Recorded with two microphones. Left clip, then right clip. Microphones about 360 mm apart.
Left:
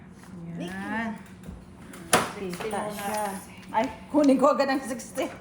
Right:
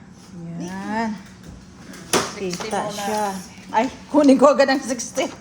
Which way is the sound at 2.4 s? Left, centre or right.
Right.